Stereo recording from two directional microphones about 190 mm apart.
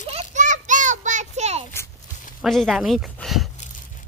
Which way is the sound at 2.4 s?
Centre (ahead or behind).